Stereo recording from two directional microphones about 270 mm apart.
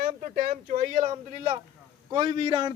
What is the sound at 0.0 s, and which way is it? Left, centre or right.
A man's voice, right.